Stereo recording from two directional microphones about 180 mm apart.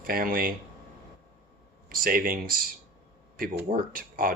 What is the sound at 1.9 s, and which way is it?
Speech, 50° right (ahead or behind).